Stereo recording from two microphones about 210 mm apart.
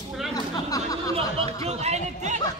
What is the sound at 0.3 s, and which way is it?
Chatter, 15° left (ahead or behind).